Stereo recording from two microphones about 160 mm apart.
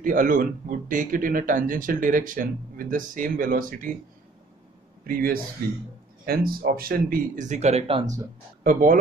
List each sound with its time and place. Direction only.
0.0 s speech: 55° right (ahead or behind)
5.0 s speech: 65° right (ahead or behind); by 8.0 s 40° right (ahead or behind)